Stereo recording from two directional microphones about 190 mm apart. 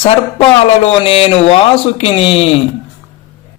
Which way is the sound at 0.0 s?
30° left (ahead or behind).